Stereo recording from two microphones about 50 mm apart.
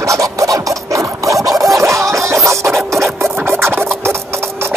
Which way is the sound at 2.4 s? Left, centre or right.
Right.